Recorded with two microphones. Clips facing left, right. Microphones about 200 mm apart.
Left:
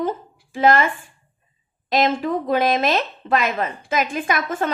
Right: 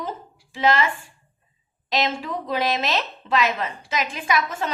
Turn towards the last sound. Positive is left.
turn(degrees=50)  # may be behind; listen again after turning